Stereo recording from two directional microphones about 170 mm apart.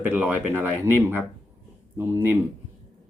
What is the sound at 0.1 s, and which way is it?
Speech, 10° right (ahead or behind).